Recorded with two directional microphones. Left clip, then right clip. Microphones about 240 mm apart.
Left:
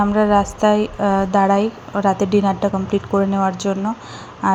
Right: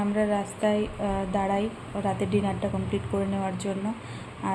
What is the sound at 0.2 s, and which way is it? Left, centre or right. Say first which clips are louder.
A woman's voice: left 10 dB; left.